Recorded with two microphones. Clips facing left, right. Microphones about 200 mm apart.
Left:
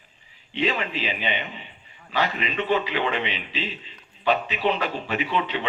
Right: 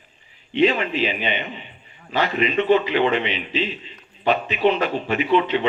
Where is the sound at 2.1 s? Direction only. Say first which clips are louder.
Right 5 dB; 45° right (ahead or behind).